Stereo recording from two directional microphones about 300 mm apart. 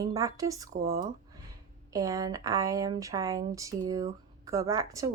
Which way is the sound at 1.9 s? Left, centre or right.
Centre.